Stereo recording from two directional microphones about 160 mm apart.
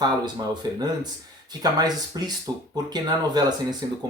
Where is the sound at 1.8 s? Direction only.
25° right (ahead or behind).